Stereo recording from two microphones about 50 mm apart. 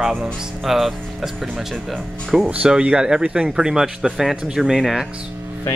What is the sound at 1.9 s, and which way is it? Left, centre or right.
Speech, centre.